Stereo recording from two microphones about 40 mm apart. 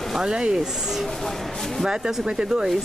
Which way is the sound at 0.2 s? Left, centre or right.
Right.